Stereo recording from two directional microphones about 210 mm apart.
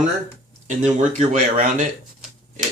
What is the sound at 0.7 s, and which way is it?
Speech, 35° right (ahead or behind).